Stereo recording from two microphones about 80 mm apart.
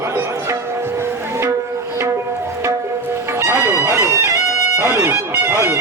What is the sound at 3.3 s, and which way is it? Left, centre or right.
Music, right.